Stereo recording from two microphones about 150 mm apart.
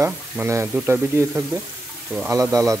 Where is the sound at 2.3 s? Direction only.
20° right (ahead or behind).